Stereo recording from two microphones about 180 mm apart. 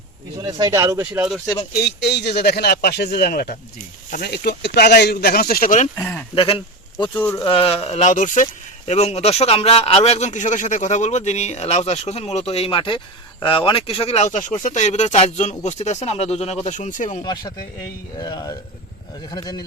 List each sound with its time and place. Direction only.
0.4 s speech: 20° right (ahead or behind)
1.8 s speech: 70° left (ahead or behind); by 5.9 s 45° left (ahead or behind)
6.0 s speech: 10° left (ahead or behind)
6.3 s speech: 30° left (ahead or behind)
7.1 s speech: 10° left (ahead or behind)
7.4 s speech: 30° left (ahead or behind)
17.2 s speech: 20° left (ahead or behind)